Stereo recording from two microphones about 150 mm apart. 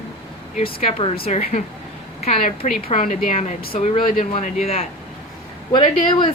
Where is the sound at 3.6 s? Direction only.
85° left.